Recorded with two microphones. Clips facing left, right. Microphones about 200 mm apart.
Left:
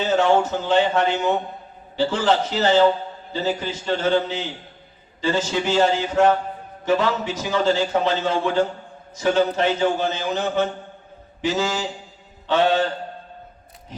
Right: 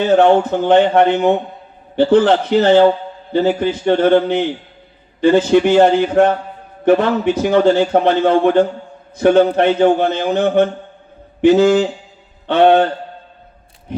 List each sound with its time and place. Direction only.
0.0 s a man's voice: 60° right (ahead or behind)